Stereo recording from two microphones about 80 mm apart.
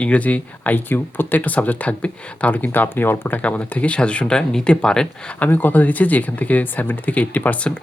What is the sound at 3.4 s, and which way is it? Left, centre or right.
Speech, centre.